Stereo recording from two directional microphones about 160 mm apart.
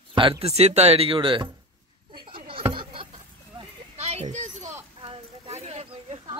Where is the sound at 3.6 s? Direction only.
40° right (ahead or behind).